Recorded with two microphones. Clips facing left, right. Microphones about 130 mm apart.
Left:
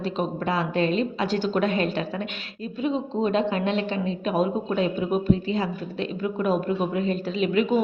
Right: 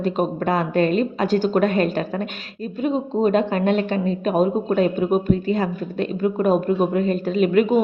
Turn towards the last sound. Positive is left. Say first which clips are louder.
# right 5 dB
turn(degrees=-50)  # may be behind; listen again after turning